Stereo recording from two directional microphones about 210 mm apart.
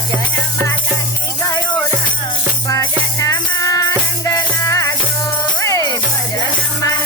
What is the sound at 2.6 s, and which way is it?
Music, 15° left (ahead or behind).